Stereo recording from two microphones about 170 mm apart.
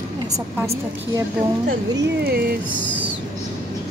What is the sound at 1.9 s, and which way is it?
Speech, 65° right (ahead or behind).